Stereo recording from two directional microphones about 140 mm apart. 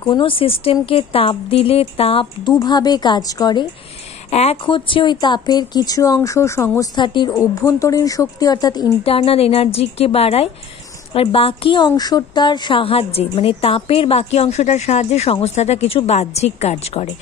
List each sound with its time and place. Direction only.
0.0 s speech: 35° left (ahead or behind)
2.4 s a woman's voice: 30° left (ahead or behind)
4.3 s speech: 50° left (ahead or behind)
4.6 s a woman's voice: 35° left (ahead or behind); by 6.9 s 20° left (ahead or behind)
7.0 s a woman's voice: 30° left (ahead or behind)
9.0 s a woman's voice: 45° left (ahead or behind)
11.9 s a woman's voice: 25° left (ahead or behind); by 17.1 s 50° left (ahead or behind)